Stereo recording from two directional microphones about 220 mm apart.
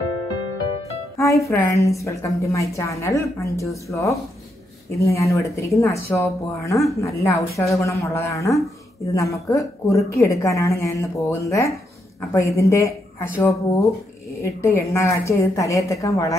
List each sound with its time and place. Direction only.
1.1 s a woman's voice: 15° left (ahead or behind)